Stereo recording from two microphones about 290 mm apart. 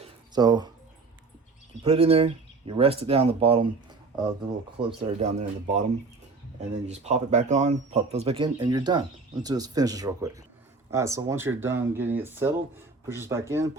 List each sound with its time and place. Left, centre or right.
0.0 s a sound: centre
1.8 s speech: centre
4.9 s speech: right